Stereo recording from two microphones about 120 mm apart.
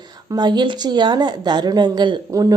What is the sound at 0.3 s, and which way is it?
A woman's voice, 35° right (ahead or behind).